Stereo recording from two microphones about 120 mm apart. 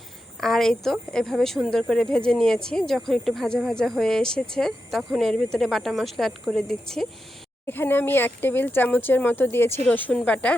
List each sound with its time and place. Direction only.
0.3 s a woman's voice: 5° left (ahead or behind)
7.7 s speech: 15° left (ahead or behind)